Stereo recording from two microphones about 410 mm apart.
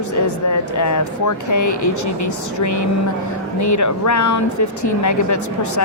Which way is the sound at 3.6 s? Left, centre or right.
Left.